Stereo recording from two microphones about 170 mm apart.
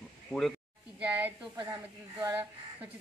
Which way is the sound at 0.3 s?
Centre (ahead or behind).